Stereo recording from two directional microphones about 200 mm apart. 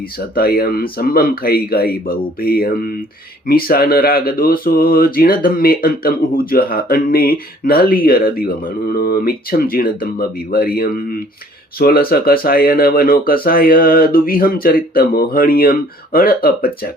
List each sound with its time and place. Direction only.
0.3 s speech: 50° left (ahead or behind)